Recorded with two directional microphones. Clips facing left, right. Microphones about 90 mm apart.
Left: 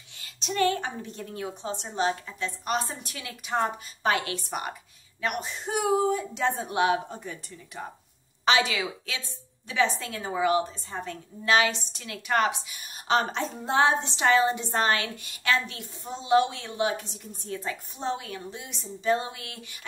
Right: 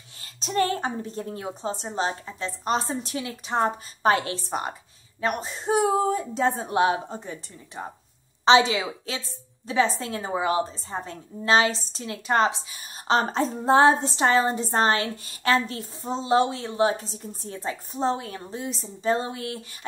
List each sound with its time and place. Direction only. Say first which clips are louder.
0.2 s a woman's voice: right 1 dB; 35° right (ahead or behind)